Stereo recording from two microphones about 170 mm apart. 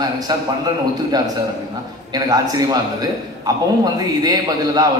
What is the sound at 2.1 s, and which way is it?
A man's voice, 20° right (ahead or behind).